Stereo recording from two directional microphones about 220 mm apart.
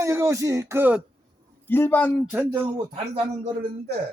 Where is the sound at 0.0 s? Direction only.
15° right (ahead or behind).